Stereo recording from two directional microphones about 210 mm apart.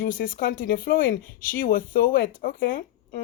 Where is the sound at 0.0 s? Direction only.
40° left (ahead or behind).